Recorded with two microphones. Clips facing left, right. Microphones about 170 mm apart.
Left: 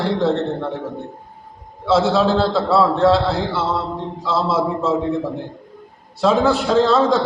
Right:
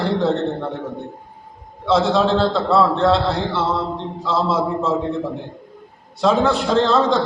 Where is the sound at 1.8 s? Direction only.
5° left (ahead or behind).